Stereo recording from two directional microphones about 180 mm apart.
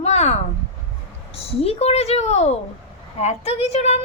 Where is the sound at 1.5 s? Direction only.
35° left (ahead or behind).